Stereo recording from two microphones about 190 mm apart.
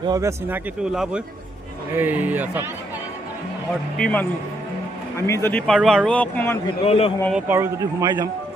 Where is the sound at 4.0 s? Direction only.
5° left (ahead or behind).